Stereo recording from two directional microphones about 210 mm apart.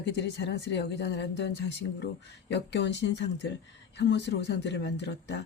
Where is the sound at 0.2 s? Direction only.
55° left (ahead or behind).